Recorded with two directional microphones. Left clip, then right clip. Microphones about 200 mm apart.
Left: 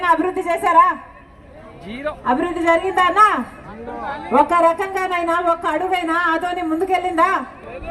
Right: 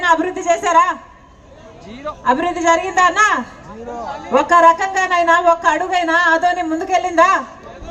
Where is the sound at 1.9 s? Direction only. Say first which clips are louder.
Left 2 dB; 45° left (ahead or behind).